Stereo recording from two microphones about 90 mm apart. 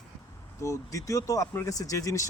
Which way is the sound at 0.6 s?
35° left (ahead or behind).